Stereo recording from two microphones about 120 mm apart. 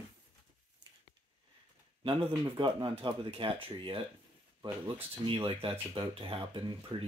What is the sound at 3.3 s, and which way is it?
Speech, 50° right (ahead or behind).